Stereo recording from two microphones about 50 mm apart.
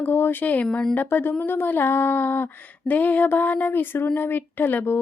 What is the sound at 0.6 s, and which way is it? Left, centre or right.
Speech, left.